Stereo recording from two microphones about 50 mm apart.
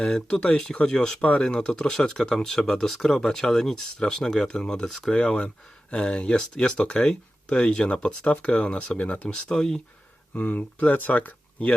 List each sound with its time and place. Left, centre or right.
0.0 s speech: centre; by 9.3 s left
9.5 s speech: centre
10.3 s speech: left